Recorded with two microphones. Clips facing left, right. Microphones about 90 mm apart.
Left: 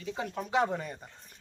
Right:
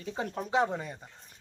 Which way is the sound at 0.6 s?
15° right (ahead or behind).